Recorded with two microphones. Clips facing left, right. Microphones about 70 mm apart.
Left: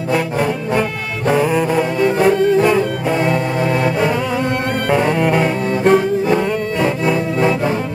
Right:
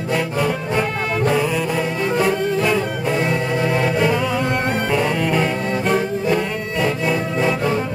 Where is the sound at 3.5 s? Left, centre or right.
Left.